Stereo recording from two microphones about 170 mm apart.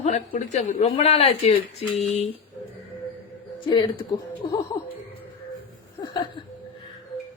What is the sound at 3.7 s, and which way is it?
Speech, 25° left (ahead or behind).